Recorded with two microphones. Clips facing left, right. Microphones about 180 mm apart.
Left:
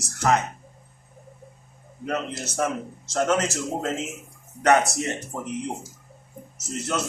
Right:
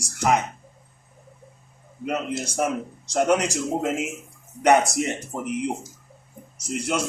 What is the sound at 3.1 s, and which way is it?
A man's voice, 15° right (ahead or behind).